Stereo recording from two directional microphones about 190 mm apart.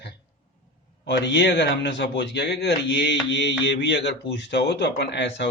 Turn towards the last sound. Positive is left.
turn(degrees=65)  # may be behind; listen again after turning